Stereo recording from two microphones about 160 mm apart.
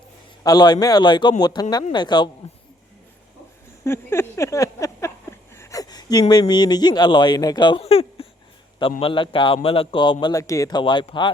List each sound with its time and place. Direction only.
0.4 s a man's voice: 25° left (ahead or behind)
3.8 s a man's voice: 15° left (ahead or behind)